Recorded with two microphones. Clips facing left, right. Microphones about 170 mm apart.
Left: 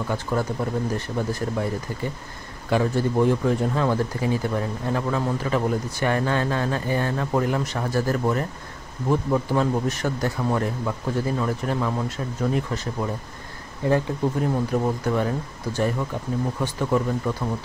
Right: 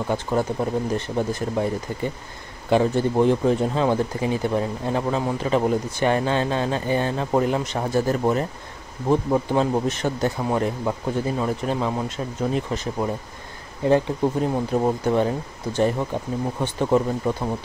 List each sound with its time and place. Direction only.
0.1 s speech: 20° right (ahead or behind)
2.7 s speech: 25° right (ahead or behind)